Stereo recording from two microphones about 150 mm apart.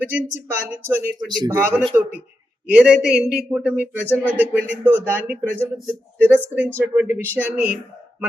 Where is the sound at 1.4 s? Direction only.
20° right (ahead or behind).